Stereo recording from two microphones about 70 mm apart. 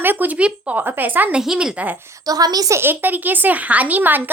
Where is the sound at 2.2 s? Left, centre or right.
Right.